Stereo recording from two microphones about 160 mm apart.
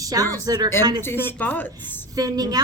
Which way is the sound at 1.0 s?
15° left (ahead or behind).